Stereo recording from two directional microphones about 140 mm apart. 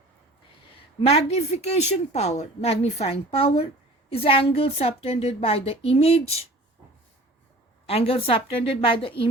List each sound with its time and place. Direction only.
1.0 s a woman's voice: 50° left (ahead or behind)
7.9 s a woman's voice: 45° left (ahead or behind)